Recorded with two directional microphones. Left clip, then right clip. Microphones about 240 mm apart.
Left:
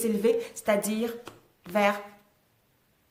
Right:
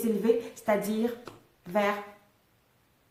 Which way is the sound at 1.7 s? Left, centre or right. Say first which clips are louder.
Left 3 dB; left.